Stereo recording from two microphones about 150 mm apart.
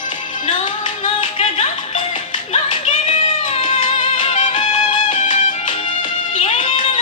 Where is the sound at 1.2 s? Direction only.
35° left (ahead or behind).